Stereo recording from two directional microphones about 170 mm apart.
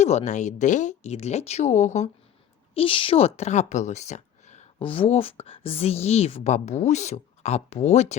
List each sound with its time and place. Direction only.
0.0 s speech: 40° left (ahead or behind)
2.7 s speech: 30° left (ahead or behind)